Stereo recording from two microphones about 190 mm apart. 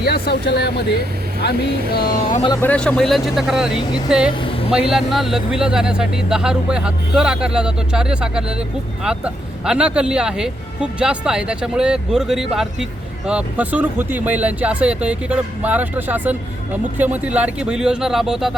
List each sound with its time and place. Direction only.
0.0 s speech: 60° left (ahead or behind)
2.6 s speech: 5° left (ahead or behind)
4.4 s vehicle: 30° left (ahead or behind)
4.7 s speech: 5° right (ahead or behind)